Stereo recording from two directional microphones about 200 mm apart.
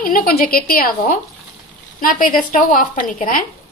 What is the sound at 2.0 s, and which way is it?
A woman's voice, 45° left (ahead or behind).